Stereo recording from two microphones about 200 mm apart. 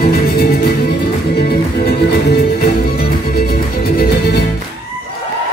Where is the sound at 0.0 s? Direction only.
50° left (ahead or behind).